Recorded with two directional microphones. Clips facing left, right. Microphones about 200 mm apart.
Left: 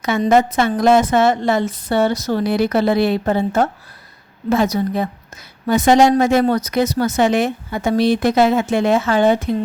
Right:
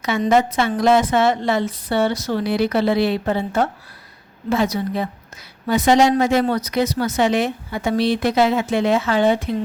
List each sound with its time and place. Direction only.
0.0 s speech: 45° left (ahead or behind)